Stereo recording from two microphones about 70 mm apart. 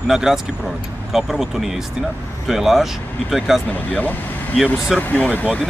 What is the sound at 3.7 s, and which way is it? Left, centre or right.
Speech, left.